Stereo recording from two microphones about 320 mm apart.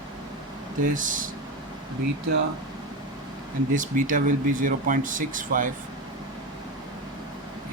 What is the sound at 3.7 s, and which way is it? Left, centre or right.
Speech, right.